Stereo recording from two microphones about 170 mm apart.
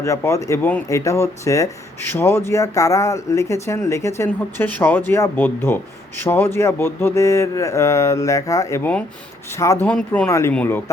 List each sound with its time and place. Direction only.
0.0 s speech: 15° left (ahead or behind)